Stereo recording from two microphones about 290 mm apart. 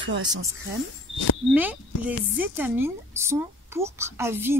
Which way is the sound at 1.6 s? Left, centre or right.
Centre.